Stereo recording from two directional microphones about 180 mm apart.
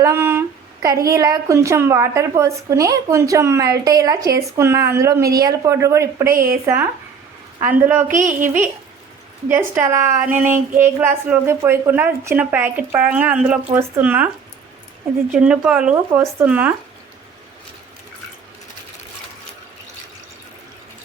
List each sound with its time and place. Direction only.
0.0 s a woman's voice: 15° right (ahead or behind)
6.3 s a woman's voice: 55° right (ahead or behind)
7.6 s a woman's voice: 10° right (ahead or behind)
8.1 s a woman's voice: 45° right (ahead or behind)
9.5 s a woman's voice: 15° right (ahead or behind)
10.7 s a woman's voice: 50° right (ahead or behind)
10.9 s a woman's voice: 10° right (ahead or behind)
15.3 s a woman's voice: 5° right (ahead or behind)